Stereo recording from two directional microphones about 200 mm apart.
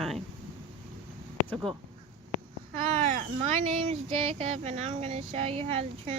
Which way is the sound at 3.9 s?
30° right (ahead or behind).